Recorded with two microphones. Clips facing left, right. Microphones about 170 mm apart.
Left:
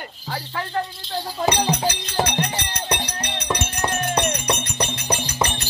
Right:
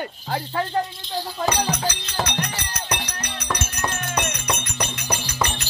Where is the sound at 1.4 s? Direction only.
25° left (ahead or behind).